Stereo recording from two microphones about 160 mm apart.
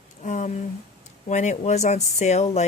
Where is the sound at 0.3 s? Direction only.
50° left (ahead or behind).